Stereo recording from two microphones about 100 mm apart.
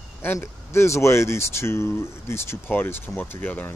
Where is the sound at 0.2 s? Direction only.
25° left (ahead or behind).